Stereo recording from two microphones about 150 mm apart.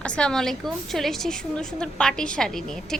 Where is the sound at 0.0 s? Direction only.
5° left (ahead or behind).